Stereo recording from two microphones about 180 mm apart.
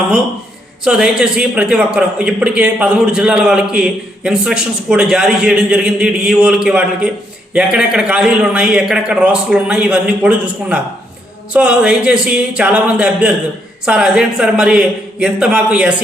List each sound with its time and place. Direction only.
0.9 s a man's voice: 5° right (ahead or behind)